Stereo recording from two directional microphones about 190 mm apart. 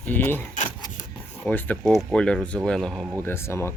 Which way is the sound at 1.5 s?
10° left (ahead or behind).